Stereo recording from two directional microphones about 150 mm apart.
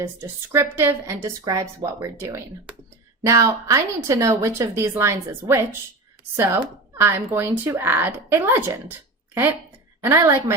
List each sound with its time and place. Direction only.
0.0 s a woman's voice: 15° right (ahead or behind)